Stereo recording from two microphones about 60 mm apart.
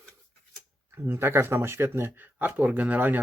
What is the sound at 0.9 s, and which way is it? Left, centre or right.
Speech, right.